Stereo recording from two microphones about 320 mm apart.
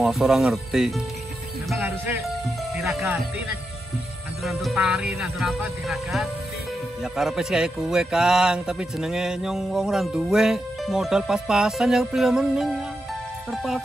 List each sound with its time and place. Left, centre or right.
0.0 s speech: centre